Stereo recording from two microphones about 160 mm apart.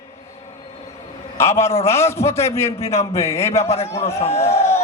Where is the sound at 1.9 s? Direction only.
15° left (ahead or behind).